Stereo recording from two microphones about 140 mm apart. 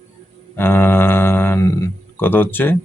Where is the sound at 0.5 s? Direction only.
15° left (ahead or behind).